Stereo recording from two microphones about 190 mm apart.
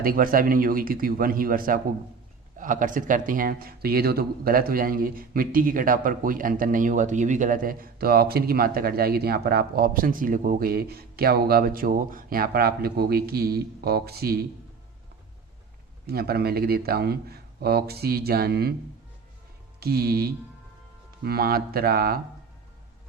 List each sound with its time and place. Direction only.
0.0 s speech: 50° right (ahead or behind)
16.0 s a man's voice: 55° right (ahead or behind)
19.8 s a man's voice: 55° right (ahead or behind)